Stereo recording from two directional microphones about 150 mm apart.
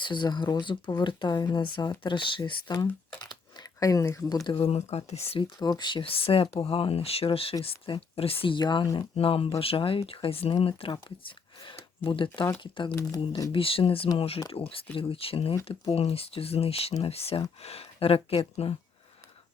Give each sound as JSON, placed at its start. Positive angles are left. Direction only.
{"t": 0.0, "sound": "speech", "side_deg": 30}
{"t": 3.2, "sound": "a sound", "side_deg": 25}
{"t": 4.3, "sound": "speech", "side_deg": 30}
{"t": 5.5, "sound": "speech", "side_deg": 25}
{"t": 9.1, "sound": "speech", "side_deg": 40}